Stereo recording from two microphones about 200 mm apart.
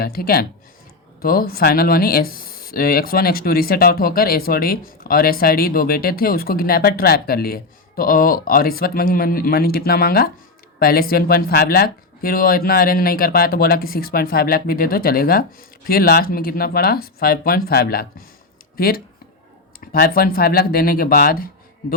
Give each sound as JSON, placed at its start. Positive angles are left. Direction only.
{"t": 0.0, "sound": "speech", "side_deg": 50}